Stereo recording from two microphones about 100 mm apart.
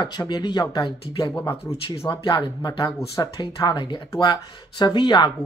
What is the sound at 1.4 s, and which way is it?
Speech, 25° left (ahead or behind).